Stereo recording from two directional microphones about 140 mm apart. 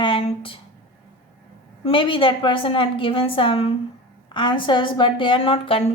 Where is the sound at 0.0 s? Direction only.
40° left (ahead or behind).